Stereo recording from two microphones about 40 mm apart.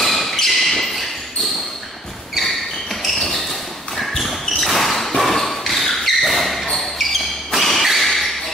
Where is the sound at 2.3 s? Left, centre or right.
Centre.